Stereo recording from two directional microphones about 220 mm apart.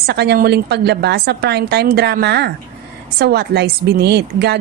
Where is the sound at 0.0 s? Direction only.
50° right (ahead or behind).